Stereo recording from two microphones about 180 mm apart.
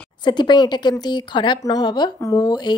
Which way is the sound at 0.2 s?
25° left (ahead or behind).